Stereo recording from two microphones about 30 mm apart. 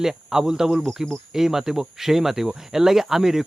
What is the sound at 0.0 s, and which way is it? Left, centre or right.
Speech, centre.